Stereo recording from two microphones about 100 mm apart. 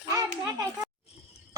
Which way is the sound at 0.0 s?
40° right (ahead or behind).